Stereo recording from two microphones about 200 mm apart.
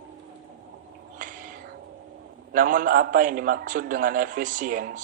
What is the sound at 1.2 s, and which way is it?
Cat, 40° right (ahead or behind).